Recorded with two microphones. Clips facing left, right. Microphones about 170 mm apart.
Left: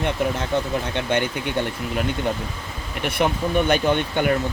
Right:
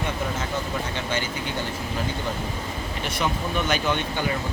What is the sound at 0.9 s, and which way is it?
Speech, 60° left (ahead or behind).